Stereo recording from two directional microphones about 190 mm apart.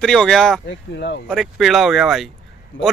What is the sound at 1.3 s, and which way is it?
Speech, centre (ahead or behind).